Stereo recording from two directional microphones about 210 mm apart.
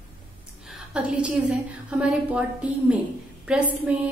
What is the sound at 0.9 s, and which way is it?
A woman's voice, 5° right (ahead or behind).